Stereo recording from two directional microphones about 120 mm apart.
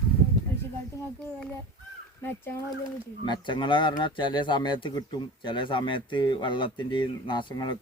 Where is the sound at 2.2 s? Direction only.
20° left (ahead or behind).